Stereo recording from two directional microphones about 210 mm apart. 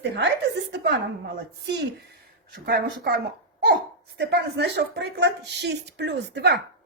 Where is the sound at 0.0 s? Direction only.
55° right (ahead or behind).